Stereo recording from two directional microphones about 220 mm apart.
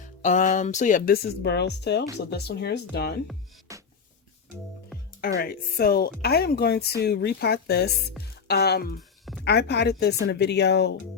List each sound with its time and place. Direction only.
0.0 s speech: 35° left (ahead or behind)
3.7 s music: 15° right (ahead or behind)
5.2 s speech: 40° left (ahead or behind)
9.0 s music: centre (ahead or behind)
9.4 s speech: 50° left (ahead or behind)